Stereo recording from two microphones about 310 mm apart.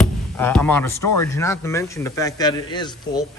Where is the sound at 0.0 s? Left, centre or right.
Centre.